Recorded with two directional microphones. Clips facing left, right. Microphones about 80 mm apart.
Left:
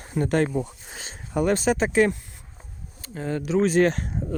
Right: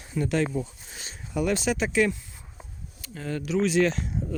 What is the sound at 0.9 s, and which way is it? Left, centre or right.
Speech, left.